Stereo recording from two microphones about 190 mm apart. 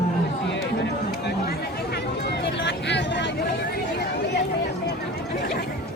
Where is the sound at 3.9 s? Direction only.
60° left (ahead or behind).